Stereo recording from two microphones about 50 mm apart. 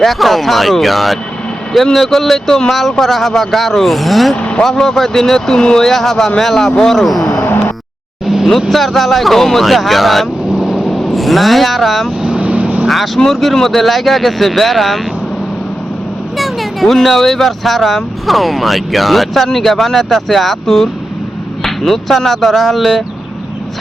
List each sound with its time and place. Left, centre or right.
0.0 s speech: centre
4.4 s vehicle: left
4.6 s speech: centre
7.4 s a sound: left
8.7 s speech: centre
12.4 s vehicle: right
13.3 s speech: centre
16.4 s speech: centre